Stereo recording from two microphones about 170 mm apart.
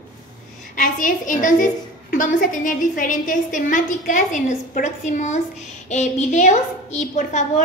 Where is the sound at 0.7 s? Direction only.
50° left (ahead or behind).